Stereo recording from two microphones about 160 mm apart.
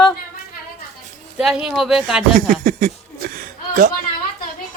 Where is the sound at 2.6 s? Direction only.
60° right (ahead or behind).